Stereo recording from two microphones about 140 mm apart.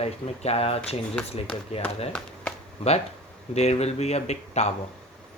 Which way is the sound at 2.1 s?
10° left (ahead or behind).